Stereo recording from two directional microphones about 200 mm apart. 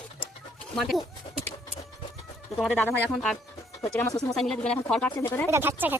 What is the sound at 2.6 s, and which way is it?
Speech, 5° left (ahead or behind).